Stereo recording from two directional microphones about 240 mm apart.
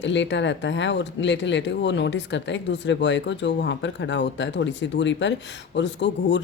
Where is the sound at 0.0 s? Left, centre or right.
Left.